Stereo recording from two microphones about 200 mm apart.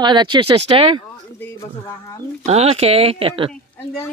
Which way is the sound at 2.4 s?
30° right (ahead or behind).